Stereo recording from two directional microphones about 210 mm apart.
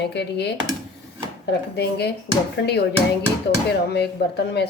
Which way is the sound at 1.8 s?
50° left (ahead or behind).